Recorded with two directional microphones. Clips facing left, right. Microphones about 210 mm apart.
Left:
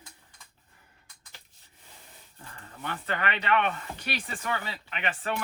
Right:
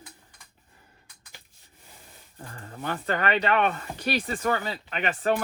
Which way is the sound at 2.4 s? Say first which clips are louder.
Right 5 dB; 40° right (ahead or behind).